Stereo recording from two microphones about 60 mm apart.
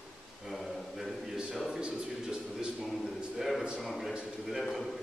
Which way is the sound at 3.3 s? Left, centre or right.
Centre.